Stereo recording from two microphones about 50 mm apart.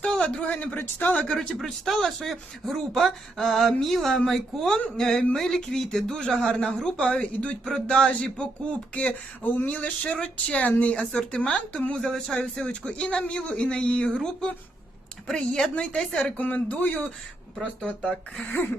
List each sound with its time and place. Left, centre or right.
0.0 s a man's voice: centre; by 1.2 s left
1.8 s a man's voice: centre; by 11.0 s left
11.3 s a man's voice: centre
11.9 s speech: centre
12.4 s a man's voice: left
15.3 s speech: centre
15.7 s a man's voice: left
17.8 s speech: centre
18.5 s speech: left